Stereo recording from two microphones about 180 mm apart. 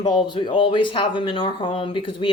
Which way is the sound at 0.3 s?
25° left (ahead or behind).